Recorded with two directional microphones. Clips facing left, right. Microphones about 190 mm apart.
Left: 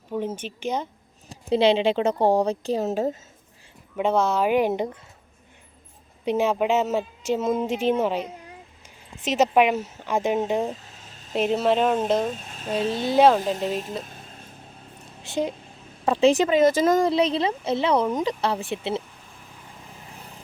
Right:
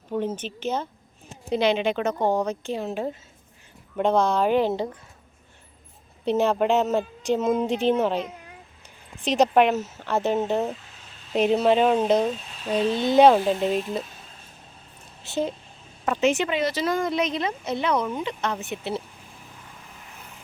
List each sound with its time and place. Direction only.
0.1 s speech: 10° left (ahead or behind)
1.3 s a woman's voice: 30° left (ahead or behind)
3.9 s speech: 5° left (ahead or behind)
6.2 s speech: 10° left (ahead or behind)
11.3 s speech: centre (ahead or behind)
12.3 s speech: 45° left (ahead or behind)
13.0 s speech: 5° left (ahead or behind)
15.2 s a woman's voice: 15° left (ahead or behind)
16.0 s a woman's voice: 30° left (ahead or behind)
17.1 s speech: 30° left (ahead or behind)